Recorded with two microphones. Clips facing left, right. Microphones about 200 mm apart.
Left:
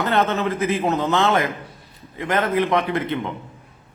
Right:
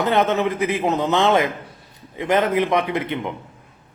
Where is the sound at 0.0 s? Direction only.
15° right (ahead or behind).